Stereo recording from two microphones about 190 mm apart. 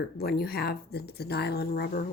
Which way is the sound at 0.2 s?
55° left (ahead or behind).